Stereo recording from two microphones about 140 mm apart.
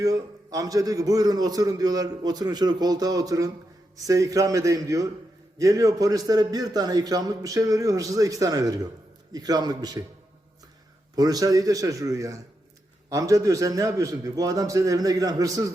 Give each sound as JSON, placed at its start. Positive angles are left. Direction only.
{"t": 0.0, "sound": "a man's voice", "side_deg": -25}
{"t": 11.1, "sound": "a man's voice", "side_deg": -25}